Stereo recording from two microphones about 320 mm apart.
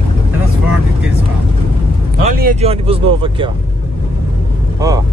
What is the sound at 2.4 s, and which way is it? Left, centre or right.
Speech, centre.